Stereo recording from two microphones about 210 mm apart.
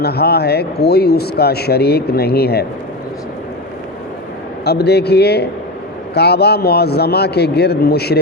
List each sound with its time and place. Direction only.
0.0 s a man's voice: 50° left (ahead or behind)
4.6 s a man's voice: 50° left (ahead or behind)